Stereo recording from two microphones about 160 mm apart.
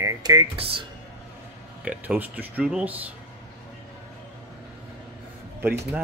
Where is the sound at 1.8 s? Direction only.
10° right (ahead or behind).